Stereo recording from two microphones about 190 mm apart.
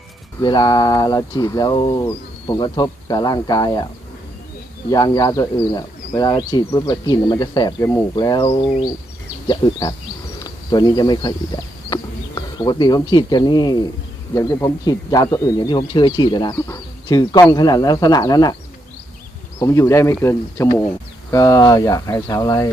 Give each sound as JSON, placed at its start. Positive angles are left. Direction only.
{"t": 0.4, "sound": "a man's voice", "side_deg": 25}
{"t": 4.9, "sound": "a man's voice", "side_deg": 20}
{"t": 9.5, "sound": "a man's voice", "side_deg": 25}
{"t": 19.5, "sound": "a man's voice", "side_deg": 15}